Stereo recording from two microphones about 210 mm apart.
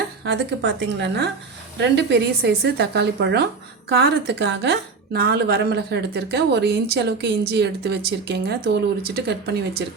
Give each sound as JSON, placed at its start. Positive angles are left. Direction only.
{"t": 0.3, "sound": "a woman's voice", "side_deg": -55}